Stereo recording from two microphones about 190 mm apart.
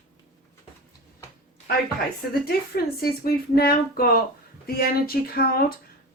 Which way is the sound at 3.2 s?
55° left (ahead or behind).